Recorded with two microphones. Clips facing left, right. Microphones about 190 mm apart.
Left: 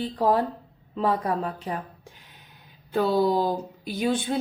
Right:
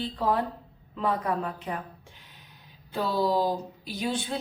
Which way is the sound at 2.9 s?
55° left (ahead or behind).